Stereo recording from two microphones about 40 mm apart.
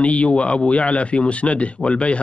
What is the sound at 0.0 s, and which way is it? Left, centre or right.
A man's voice, left.